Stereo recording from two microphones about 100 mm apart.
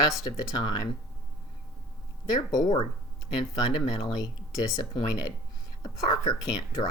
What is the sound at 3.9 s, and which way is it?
A woman's voice, 45° left (ahead or behind).